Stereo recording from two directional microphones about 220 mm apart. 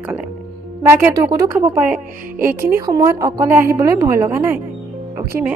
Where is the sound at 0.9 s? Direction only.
10° right (ahead or behind).